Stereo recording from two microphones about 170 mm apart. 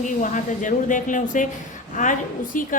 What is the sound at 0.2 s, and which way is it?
A woman's voice, 50° left (ahead or behind).